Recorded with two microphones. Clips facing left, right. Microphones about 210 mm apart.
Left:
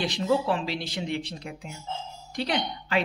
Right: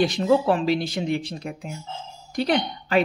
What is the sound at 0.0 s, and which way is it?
Speech, 50° right (ahead or behind).